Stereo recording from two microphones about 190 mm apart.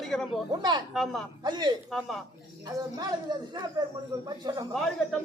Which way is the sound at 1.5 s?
25° right (ahead or behind).